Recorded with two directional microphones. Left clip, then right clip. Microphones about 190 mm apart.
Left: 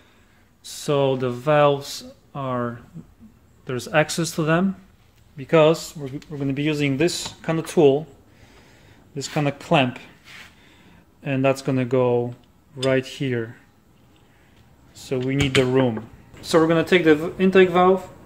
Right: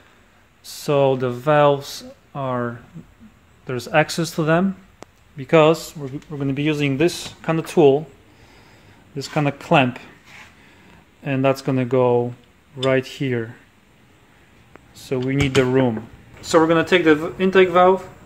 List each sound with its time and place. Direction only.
0.7 s speech: 10° right (ahead or behind)
9.1 s speech: 10° right (ahead or behind)
11.2 s speech: 10° right (ahead or behind)
15.0 s speech: 10° right (ahead or behind)
16.3 s speech: 10° left (ahead or behind)